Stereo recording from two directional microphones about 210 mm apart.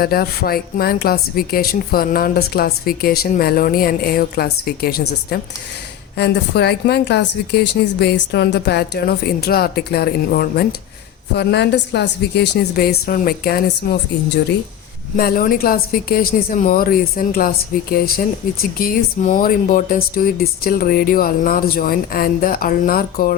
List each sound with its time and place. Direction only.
0.0 s speech: 45° left (ahead or behind)
15.1 s speech: 45° left (ahead or behind)